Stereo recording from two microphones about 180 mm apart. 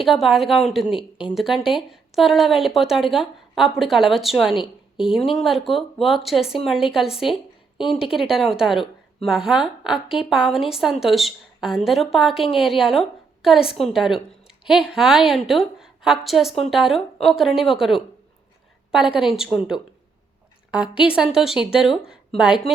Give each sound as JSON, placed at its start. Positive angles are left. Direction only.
{"t": 0.0, "sound": "a woman's voice", "side_deg": 0}
{"t": 4.5, "sound": "a woman's voice", "side_deg": 25}
{"t": 5.1, "sound": "a woman's voice", "side_deg": 0}